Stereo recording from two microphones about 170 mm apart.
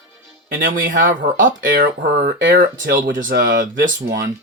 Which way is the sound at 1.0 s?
50° right (ahead or behind).